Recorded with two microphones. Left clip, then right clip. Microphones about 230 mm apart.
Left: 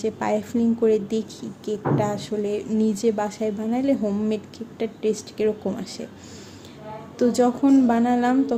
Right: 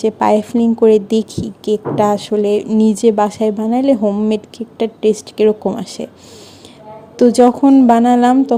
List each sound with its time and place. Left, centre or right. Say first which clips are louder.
0.0 s a woman's voice: right 11 dB; right
7.2 s a woman's voice: right 10 dB; right